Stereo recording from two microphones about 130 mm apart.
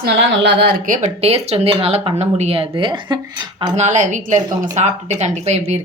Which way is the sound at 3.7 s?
65° right (ahead or behind).